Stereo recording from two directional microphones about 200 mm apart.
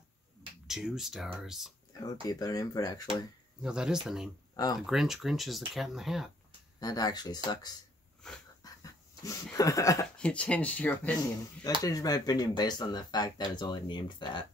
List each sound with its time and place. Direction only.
0.7 s speech: centre (ahead or behind)
2.2 s speech: 20° left (ahead or behind)
3.6 s speech: 5° right (ahead or behind)
6.8 s speech: 20° left (ahead or behind)
8.6 s dog: 20° left (ahead or behind)
9.2 s speech: 15° left (ahead or behind)
10.1 s speech: 5° left (ahead or behind)
11.8 s speech: 20° left (ahead or behind)